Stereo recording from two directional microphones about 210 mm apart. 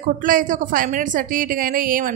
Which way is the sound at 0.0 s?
40° right (ahead or behind).